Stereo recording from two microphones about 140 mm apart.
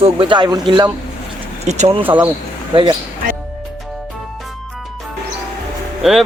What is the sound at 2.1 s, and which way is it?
Speech, 10° right (ahead or behind).